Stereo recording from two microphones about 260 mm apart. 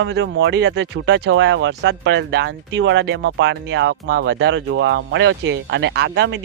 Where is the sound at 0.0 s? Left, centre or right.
Right.